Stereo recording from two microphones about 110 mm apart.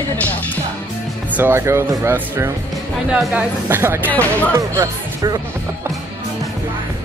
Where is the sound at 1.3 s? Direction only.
20° right (ahead or behind).